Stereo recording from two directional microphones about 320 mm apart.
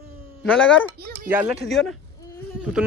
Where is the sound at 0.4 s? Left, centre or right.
Centre.